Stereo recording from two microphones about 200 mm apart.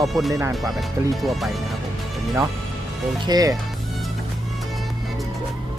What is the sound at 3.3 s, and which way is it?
Speech, 20° right (ahead or behind).